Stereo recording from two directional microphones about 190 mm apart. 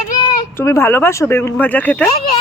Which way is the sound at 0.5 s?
15° left (ahead or behind).